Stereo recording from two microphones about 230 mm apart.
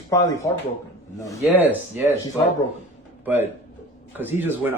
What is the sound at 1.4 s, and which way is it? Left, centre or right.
Speech, centre.